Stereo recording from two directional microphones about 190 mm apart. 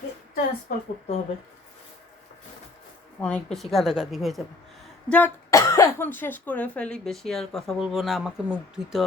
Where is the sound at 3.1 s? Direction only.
5° left (ahead or behind).